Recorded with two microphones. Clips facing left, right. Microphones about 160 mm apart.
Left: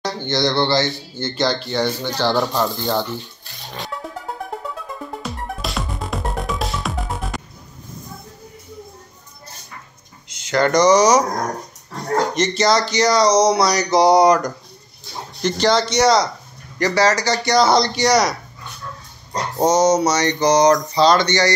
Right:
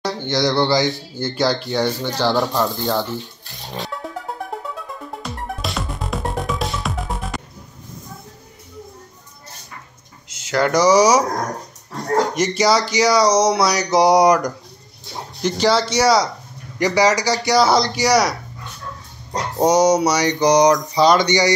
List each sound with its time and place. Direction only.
0.0 s speech: 10° right (ahead or behind)
4.0 s music: centre (ahead or behind)
5.2 s music: centre (ahead or behind)
10.3 s speech: 5° right (ahead or behind)
12.4 s speech: 10° right (ahead or behind)
19.6 s speech: 10° right (ahead or behind)